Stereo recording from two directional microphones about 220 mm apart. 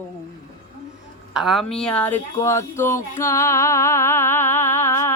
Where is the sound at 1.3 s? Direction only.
Centre (ahead or behind).